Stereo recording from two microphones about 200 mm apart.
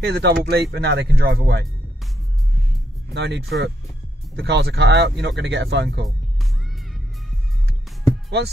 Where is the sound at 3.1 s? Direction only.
60° right (ahead or behind).